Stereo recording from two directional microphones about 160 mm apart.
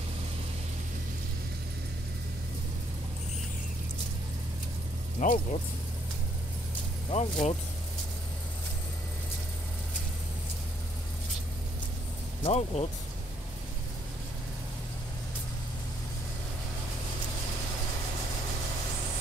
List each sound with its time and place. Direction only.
5.2 s speech: 55° left (ahead or behind)
7.1 s speech: 45° left (ahead or behind)
12.4 s speech: 40° left (ahead or behind)